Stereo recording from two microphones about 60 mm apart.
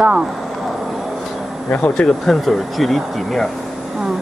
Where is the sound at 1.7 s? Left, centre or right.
Left.